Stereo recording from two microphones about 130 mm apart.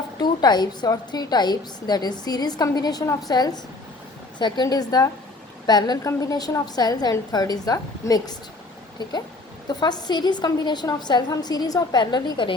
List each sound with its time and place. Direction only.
0.2 s a woman's voice: 30° left (ahead or behind)
9.6 s a woman's voice: 35° left (ahead or behind)